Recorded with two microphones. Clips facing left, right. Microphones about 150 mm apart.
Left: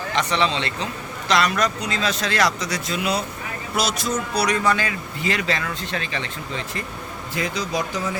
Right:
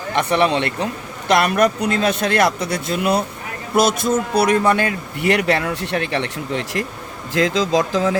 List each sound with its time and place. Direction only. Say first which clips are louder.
0.2 s speech: right 6 dB; 55° right (ahead or behind); by 6.8 s 75° right (ahead or behind)
7.3 s speech: right 8 dB; 90° right